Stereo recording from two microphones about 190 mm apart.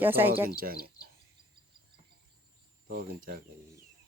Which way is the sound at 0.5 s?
50° right (ahead or behind).